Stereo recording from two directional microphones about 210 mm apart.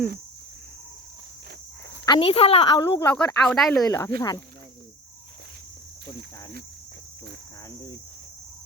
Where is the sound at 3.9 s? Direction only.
15° left (ahead or behind).